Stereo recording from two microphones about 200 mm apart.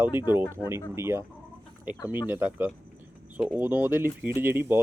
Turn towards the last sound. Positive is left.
turn(degrees=-10)  # may be behind; listen again after turning